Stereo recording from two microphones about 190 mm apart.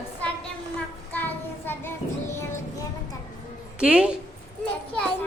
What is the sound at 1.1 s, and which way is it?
Child singing, 10° left (ahead or behind).